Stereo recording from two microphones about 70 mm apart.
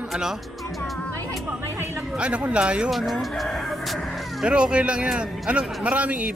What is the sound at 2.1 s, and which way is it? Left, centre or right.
Speech, centre.